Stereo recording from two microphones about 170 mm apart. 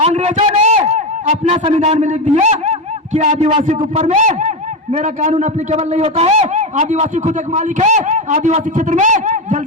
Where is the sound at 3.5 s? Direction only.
35° right (ahead or behind).